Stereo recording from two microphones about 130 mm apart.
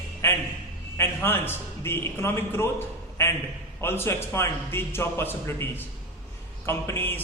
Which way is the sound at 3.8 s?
20° left (ahead or behind).